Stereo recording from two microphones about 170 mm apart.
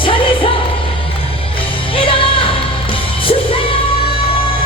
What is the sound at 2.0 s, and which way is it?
Music, 30° left (ahead or behind).